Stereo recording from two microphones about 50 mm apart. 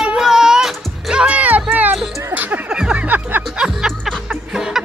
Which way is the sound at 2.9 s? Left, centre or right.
Right.